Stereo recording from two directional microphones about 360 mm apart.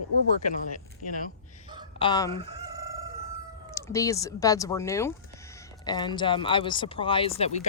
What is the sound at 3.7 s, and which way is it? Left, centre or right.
Speech, centre.